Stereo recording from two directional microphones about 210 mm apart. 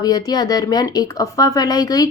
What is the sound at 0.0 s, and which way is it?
Speech, 20° left (ahead or behind).